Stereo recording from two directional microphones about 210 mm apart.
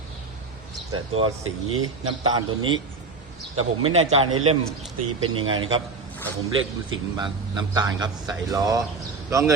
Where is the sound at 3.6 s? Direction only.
30° right (ahead or behind).